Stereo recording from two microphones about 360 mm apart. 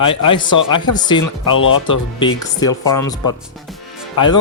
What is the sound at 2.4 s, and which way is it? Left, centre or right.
Speech, centre.